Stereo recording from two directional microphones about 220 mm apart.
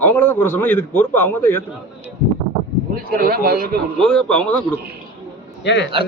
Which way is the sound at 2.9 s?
40° right (ahead or behind).